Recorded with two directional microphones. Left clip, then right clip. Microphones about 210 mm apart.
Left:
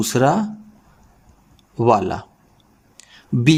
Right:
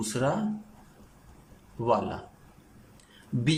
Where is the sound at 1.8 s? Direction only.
55° left (ahead or behind).